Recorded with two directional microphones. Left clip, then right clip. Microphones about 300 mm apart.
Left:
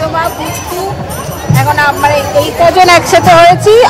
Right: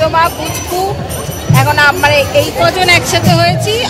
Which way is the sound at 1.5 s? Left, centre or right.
Centre.